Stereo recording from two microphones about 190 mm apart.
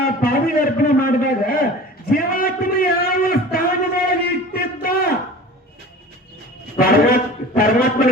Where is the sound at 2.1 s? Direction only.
50° left (ahead or behind).